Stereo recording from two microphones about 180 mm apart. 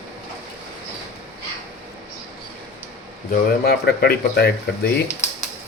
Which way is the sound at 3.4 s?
60° left (ahead or behind).